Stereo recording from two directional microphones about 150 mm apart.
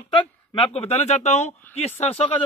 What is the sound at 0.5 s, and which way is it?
Speech, 40° left (ahead or behind).